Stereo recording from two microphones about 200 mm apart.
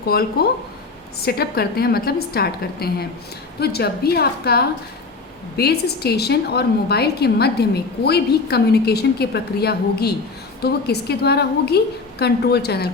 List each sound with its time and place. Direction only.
0.1 s a woman's voice: 50° left (ahead or behind)